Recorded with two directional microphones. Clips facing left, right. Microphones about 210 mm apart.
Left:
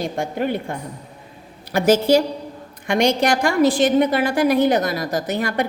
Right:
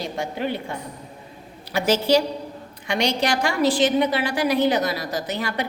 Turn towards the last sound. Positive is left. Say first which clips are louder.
# left 5 dB
turn(degrees=50)  # may be behind; listen again after turning